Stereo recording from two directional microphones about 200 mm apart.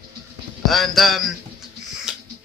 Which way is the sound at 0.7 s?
Centre (ahead or behind).